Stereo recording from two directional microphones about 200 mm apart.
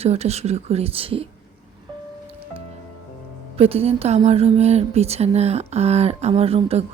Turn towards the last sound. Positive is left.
turn(degrees=-30)  # may be behind; listen again after turning